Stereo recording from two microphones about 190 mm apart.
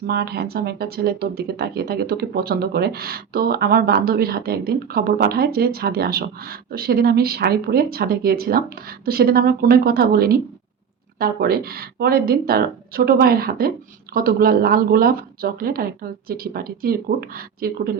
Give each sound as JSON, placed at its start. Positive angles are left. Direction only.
{"t": 0.1, "sound": "speech", "side_deg": -55}